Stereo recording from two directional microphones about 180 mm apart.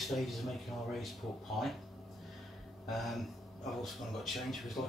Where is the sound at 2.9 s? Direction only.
Centre (ahead or behind).